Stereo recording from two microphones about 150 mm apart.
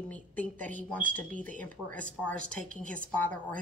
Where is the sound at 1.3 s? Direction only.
60° right (ahead or behind).